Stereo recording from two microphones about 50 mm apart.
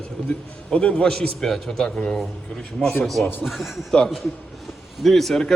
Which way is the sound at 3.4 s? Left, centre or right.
Centre.